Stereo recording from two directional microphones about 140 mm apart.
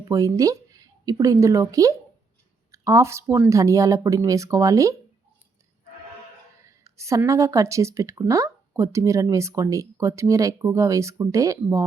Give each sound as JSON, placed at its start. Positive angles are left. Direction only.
{"t": 0.0, "sound": "a woman's voice", "side_deg": -25}
{"t": 6.8, "sound": "a woman's voice", "side_deg": -20}